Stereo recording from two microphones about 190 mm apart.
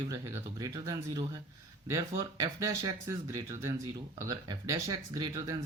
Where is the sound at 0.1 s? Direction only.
15° right (ahead or behind).